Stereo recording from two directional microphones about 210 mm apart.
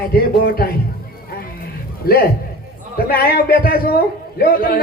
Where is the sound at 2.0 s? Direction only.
45° left (ahead or behind).